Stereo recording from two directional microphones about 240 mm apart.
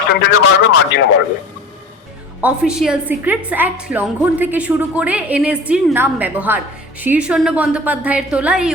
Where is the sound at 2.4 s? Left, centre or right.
Centre.